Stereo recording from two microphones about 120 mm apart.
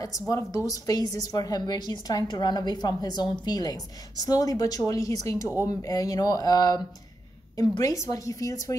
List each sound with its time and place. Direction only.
0.3 s a woman's voice: 25° left (ahead or behind)